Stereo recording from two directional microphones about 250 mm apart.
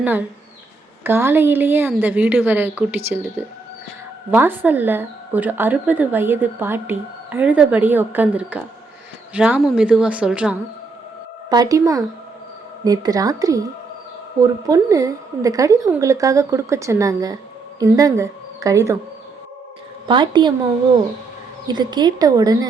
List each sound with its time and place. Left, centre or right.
0.0 s a woman's voice: centre
20.1 s a woman's voice: centre
21.7 s a woman's voice: centre